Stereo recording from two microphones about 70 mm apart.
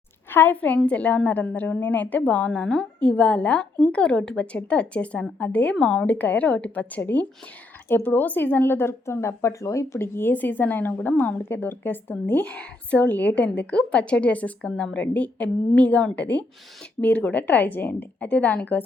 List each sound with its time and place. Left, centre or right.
0.3 s a woman's voice: left